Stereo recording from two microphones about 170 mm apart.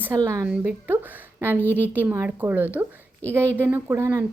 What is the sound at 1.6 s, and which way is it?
Speech, 10° left (ahead or behind).